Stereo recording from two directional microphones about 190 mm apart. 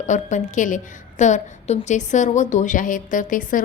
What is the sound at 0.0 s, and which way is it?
A woman's voice, 40° left (ahead or behind).